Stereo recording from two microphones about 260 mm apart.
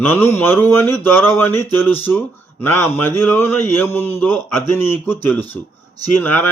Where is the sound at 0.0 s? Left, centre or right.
Centre.